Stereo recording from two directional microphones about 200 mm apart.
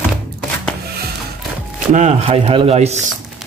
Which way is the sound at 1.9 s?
35° right (ahead or behind).